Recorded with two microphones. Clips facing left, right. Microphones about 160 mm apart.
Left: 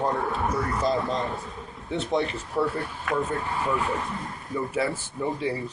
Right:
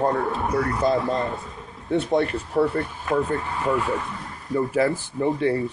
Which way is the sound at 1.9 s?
55° right (ahead or behind).